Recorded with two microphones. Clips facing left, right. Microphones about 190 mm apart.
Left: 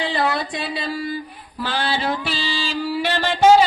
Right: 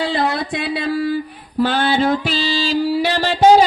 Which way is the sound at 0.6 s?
65° right (ahead or behind).